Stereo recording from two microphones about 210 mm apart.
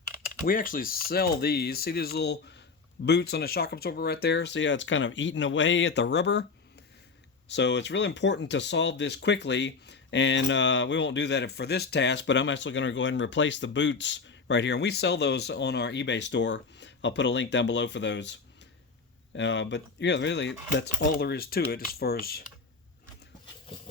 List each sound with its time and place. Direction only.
0.4 s speech: 40° left (ahead or behind)
7.4 s speech: 55° left (ahead or behind)